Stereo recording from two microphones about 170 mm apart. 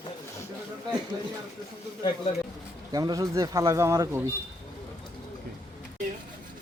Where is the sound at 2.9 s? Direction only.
20° right (ahead or behind).